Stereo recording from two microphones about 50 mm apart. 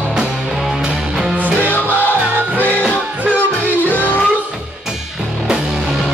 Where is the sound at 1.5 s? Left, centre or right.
Left.